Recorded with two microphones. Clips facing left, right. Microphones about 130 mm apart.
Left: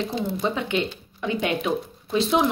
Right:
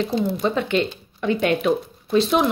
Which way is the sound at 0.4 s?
15° left (ahead or behind).